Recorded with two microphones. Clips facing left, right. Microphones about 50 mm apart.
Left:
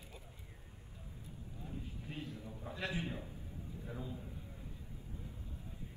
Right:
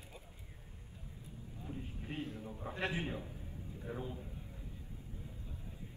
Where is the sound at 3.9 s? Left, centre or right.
Right.